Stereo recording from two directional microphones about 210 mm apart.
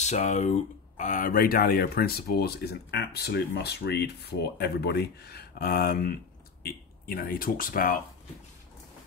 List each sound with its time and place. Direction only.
0.0 s speech: 35° left (ahead or behind)